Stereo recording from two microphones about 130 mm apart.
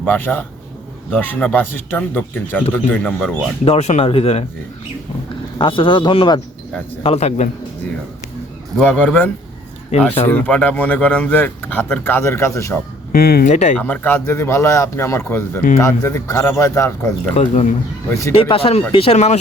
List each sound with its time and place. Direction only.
0.0 s speech: 15° left (ahead or behind)
3.6 s speech: 55° left (ahead or behind)
5.5 s speech: 40° left (ahead or behind)
7.0 s a man's voice: 50° left (ahead or behind)
8.8 s speech: 10° left (ahead or behind)
13.4 s speech: 70° left (ahead or behind)
13.7 s speech: 10° left (ahead or behind)
17.3 s a man's voice: 55° left (ahead or behind)
18.1 s speech: 25° left (ahead or behind)
18.3 s speech: 45° left (ahead or behind)